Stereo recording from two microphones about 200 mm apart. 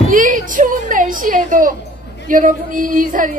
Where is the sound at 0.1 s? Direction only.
40° right (ahead or behind).